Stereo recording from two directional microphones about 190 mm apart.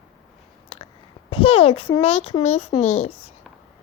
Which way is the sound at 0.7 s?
30° left (ahead or behind).